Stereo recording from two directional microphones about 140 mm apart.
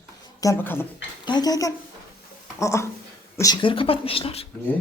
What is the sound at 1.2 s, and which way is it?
A woman's voice, 30° left (ahead or behind).